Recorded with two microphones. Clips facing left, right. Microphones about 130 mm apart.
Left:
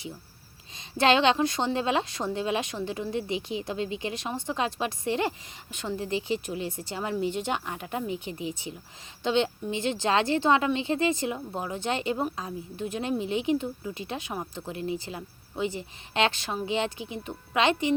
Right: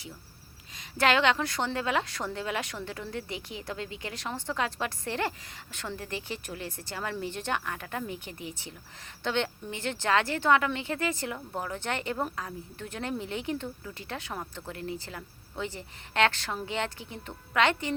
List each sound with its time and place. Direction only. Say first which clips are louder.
0.8 s a woman's voice: left 3 dB; 25° left (ahead or behind)